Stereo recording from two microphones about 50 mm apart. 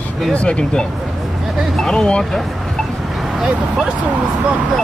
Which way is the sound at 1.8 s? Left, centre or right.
Centre.